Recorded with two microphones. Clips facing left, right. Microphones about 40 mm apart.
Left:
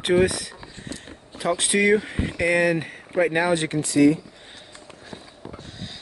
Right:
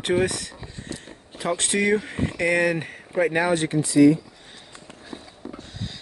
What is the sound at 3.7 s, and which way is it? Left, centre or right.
Speech, left.